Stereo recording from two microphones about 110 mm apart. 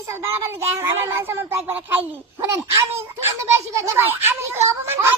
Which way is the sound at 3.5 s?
30° right (ahead or behind).